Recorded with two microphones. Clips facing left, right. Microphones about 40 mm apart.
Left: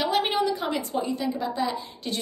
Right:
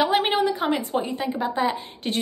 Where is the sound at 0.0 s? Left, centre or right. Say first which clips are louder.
Right 3 dB; right.